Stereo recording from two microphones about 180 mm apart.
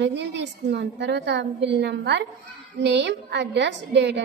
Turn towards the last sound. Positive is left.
turn(degrees=-75)  # may be behind; listen again after turning